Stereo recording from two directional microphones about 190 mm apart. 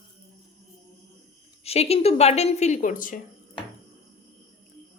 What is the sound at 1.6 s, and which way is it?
A woman's voice, 35° left (ahead or behind).